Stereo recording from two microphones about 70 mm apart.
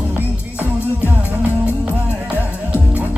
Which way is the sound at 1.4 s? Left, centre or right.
Centre.